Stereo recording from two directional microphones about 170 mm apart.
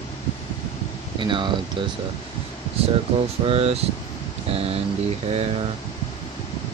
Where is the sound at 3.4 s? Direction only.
35° right (ahead or behind).